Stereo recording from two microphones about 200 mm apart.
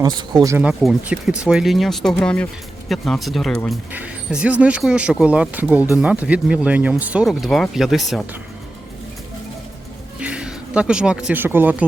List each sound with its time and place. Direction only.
0.0 s speech: 20° right (ahead or behind)
0.5 s speech: 5° right (ahead or behind)
10.2 s speech: 5° right (ahead or behind)